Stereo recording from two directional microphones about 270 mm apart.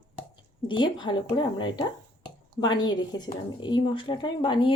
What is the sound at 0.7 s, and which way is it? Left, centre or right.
A woman's voice, centre.